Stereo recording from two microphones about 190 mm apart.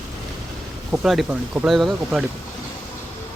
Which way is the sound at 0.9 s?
Centre (ahead or behind).